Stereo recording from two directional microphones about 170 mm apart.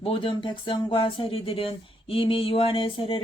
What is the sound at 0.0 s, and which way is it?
Speech, 30° left (ahead or behind).